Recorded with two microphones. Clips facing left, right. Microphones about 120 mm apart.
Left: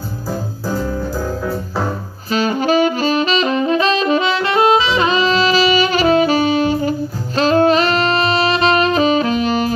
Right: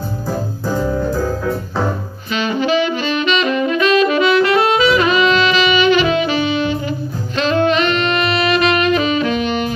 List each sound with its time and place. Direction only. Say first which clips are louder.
2.3 s saxophone: left 2 dB; 40° left (ahead or behind)